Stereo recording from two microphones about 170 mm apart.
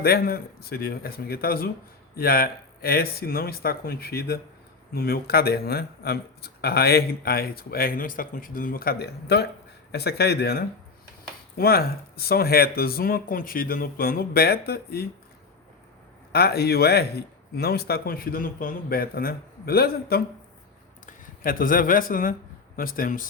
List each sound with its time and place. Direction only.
0.0 s speech: 60° left (ahead or behind)
16.3 s speech: 70° left (ahead or behind)